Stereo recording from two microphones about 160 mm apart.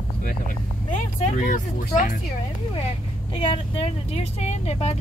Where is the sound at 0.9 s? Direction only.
50° left (ahead or behind).